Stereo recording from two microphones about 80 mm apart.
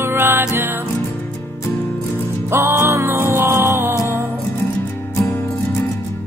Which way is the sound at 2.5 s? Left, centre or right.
Right.